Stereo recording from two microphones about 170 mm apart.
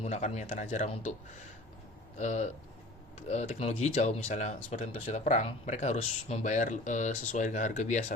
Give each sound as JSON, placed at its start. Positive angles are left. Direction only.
{"t": 0.0, "sound": "speech", "side_deg": 40}
{"t": 2.1, "sound": "speech", "side_deg": 45}